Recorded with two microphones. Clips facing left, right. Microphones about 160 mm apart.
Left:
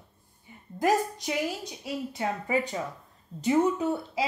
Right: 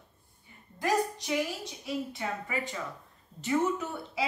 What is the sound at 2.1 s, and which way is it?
Speech, 40° left (ahead or behind).